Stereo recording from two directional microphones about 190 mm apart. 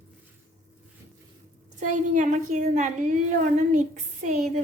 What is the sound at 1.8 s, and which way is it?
A woman's voice, 40° right (ahead or behind).